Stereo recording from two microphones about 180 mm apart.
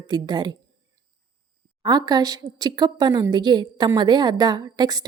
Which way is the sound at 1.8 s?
20° right (ahead or behind).